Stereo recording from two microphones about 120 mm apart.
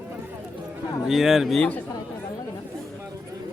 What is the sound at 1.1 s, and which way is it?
Speech, centre (ahead or behind).